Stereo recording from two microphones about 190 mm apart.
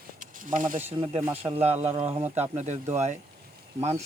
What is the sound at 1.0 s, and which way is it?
Speech, 30° right (ahead or behind).